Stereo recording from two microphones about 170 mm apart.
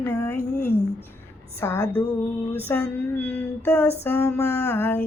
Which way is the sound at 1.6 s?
15° left (ahead or behind).